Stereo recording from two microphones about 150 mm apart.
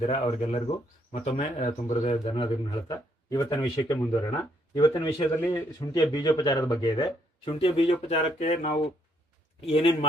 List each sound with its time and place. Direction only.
0.0 s speech: 40° left (ahead or behind)
2.2 s speech: 35° left (ahead or behind)
5.4 s a man's voice: 15° left (ahead or behind)
5.8 s speech: 25° left (ahead or behind); by 8.7 s 50° left (ahead or behind)
9.6 s a man's voice: 40° left (ahead or behind)